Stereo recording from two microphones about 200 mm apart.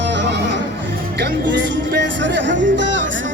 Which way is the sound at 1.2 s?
60° right (ahead or behind).